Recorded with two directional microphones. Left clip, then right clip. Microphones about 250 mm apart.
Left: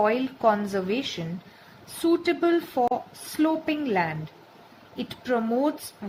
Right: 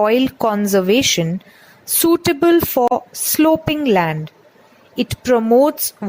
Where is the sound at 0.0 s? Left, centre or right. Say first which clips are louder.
Right 7 dB; right.